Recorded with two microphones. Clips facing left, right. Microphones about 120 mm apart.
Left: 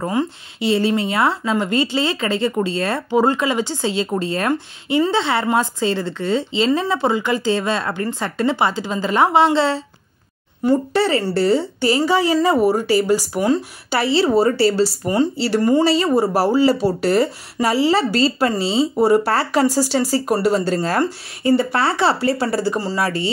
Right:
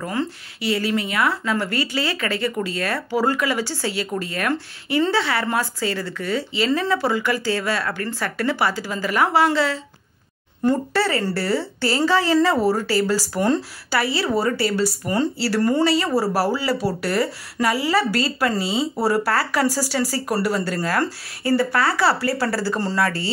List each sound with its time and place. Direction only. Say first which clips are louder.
0.0 s speech: left 4 dB; 20° left (ahead or behind)
10.6 s a woman's voice: left 3 dB; 15° left (ahead or behind)